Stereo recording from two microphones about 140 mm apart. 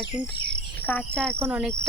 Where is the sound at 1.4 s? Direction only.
10° right (ahead or behind).